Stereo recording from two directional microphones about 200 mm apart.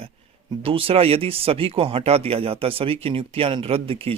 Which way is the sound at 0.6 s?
25° right (ahead or behind).